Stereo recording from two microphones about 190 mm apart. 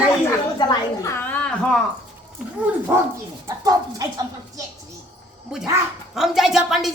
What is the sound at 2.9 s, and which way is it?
Speech, 10° right (ahead or behind).